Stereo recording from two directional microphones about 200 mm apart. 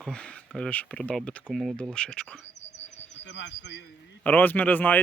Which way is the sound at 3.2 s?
60° left (ahead or behind).